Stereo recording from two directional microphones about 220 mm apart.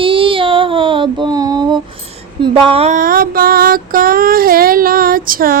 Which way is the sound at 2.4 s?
25° right (ahead or behind).